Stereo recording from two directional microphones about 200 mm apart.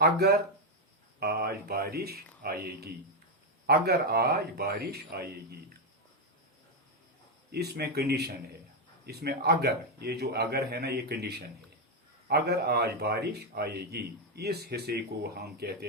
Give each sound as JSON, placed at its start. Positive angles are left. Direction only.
{"t": 0.0, "sound": "a man's voice", "side_deg": -55}
{"t": 7.5, "sound": "a man's voice", "side_deg": -55}